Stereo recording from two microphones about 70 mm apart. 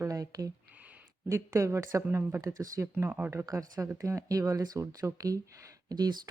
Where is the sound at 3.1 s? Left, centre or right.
Right.